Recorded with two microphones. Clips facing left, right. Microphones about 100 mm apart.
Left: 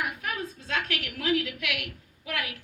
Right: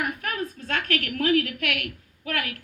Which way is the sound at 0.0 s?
50° right (ahead or behind).